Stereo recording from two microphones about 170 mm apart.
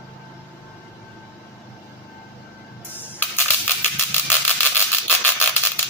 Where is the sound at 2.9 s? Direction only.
10° left (ahead or behind).